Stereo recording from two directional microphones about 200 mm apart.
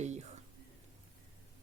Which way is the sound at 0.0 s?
35° right (ahead or behind).